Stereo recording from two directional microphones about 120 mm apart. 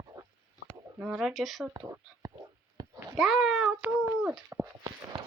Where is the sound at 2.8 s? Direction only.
35° right (ahead or behind).